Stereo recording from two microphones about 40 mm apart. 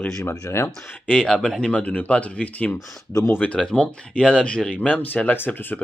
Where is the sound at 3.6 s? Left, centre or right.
Left.